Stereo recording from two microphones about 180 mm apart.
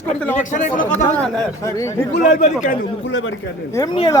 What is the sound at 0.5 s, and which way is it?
Speech, 45° left (ahead or behind).